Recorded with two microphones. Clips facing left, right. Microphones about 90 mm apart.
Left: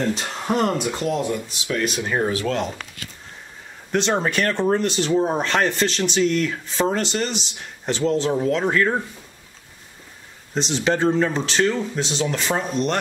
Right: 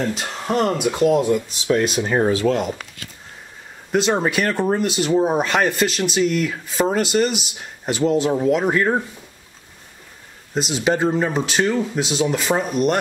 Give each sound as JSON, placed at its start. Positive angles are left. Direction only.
{"t": 0.0, "sound": "speech", "side_deg": -5}
{"t": 2.0, "sound": "speech", "side_deg": -25}
{"t": 3.9, "sound": "speech", "side_deg": -5}
{"t": 10.5, "sound": "speech", "side_deg": -5}